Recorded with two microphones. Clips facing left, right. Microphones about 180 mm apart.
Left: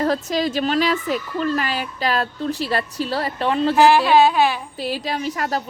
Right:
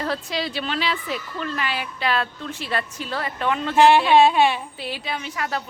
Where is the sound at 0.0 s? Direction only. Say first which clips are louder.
Left 6 dB; 45° left (ahead or behind).